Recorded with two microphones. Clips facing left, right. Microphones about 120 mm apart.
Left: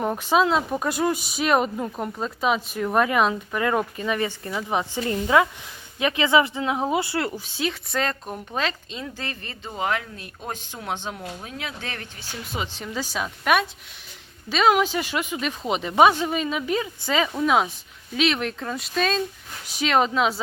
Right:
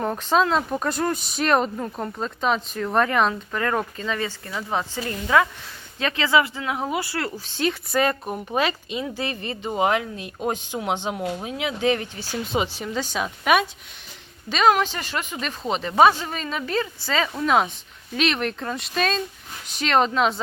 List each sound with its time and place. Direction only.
0.0 s a woman's voice: 10° left (ahead or behind)
7.6 s speech: centre (ahead or behind)
12.9 s speech: 5° left (ahead or behind)
17.3 s speech: 5° left (ahead or behind)